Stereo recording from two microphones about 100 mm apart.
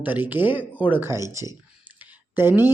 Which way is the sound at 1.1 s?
30° right (ahead or behind).